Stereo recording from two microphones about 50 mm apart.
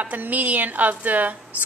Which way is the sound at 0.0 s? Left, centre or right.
Right.